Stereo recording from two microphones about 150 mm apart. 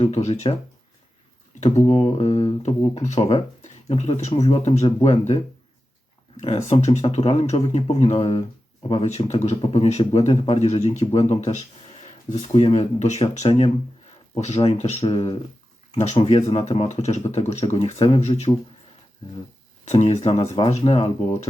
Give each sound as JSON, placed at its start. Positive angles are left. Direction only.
{"t": 0.0, "sound": "speech", "side_deg": 50}
{"t": 1.6, "sound": "speech", "side_deg": 45}
{"t": 6.3, "sound": "speech", "side_deg": 50}
{"t": 19.8, "sound": "speech", "side_deg": 50}